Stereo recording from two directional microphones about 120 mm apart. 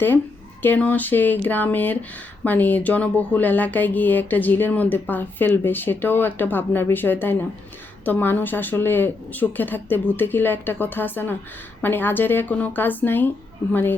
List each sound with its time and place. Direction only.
0.6 s speech: 15° left (ahead or behind)